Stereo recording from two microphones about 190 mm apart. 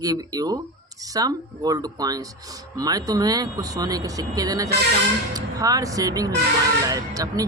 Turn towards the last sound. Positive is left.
turn(degrees=-20)  # may be behind; listen again after turning